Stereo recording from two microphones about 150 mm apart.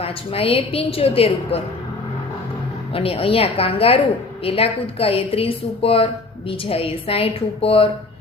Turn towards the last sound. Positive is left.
turn(degrees=40)  # may be behind; listen again after turning